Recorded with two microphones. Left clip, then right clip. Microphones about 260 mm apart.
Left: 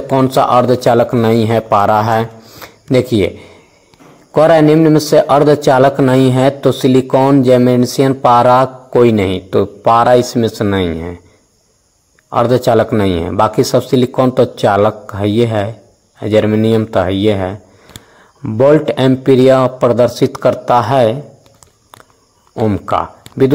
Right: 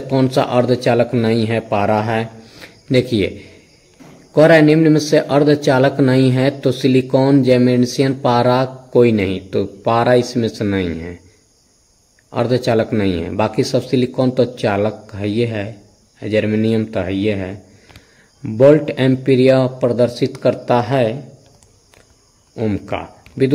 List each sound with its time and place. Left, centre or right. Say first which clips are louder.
0.1 s a man's voice: left 6 dB; centre
2.1 s a sound: left 6 dB; centre
4.3 s a man's voice: left 2 dB; centre
12.3 s a man's voice: left 6 dB; centre
18.6 s a man's voice: left 2 dB; centre
22.6 s speech: left 7 dB; centre